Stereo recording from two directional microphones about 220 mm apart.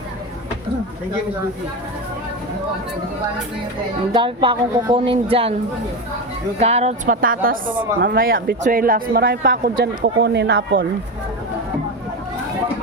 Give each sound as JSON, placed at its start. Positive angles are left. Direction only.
{"t": 4.1, "sound": "speech", "side_deg": -20}
{"t": 6.6, "sound": "a woman's voice", "side_deg": -30}